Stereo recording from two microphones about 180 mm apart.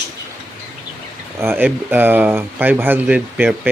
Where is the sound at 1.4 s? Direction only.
10° right (ahead or behind).